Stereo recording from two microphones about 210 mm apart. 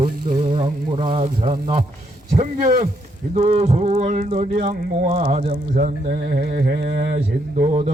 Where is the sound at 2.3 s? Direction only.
35° right (ahead or behind).